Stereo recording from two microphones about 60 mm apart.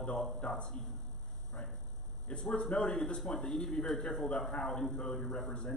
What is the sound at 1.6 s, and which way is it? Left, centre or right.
Speech, left.